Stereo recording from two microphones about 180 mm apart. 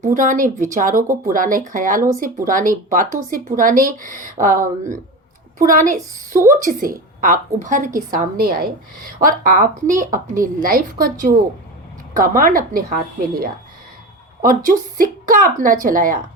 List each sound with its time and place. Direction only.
0.0 s a woman's voice: 45° right (ahead or behind)